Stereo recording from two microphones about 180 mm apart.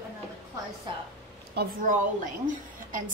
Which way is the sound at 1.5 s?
55° right (ahead or behind).